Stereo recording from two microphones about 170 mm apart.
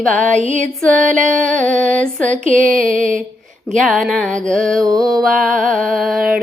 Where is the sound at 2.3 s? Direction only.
45° right (ahead or behind).